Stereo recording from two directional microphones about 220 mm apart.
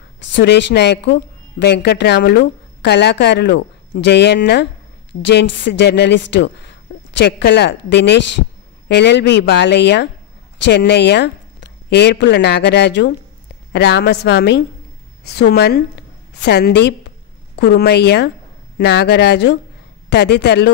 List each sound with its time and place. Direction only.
0.3 s speech: 50° left (ahead or behind)